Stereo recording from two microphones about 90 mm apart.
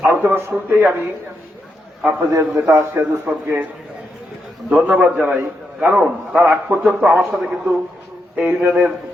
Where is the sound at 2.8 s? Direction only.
25° right (ahead or behind).